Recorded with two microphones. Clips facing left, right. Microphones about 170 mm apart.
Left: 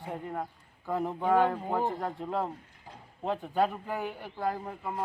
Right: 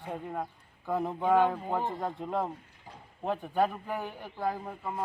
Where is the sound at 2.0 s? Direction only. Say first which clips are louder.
Even; 15° right (ahead or behind).